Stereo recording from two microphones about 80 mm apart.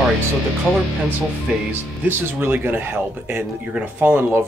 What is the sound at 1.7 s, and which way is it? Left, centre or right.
Speech, right.